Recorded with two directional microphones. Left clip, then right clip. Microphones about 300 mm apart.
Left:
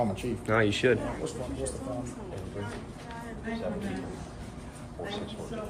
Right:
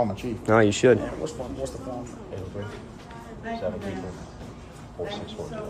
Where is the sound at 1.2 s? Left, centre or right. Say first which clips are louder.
Right 3 dB; right.